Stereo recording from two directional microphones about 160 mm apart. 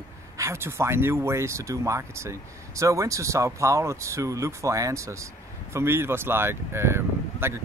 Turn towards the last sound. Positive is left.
turn(degrees=-15)  # may be behind; listen again after turning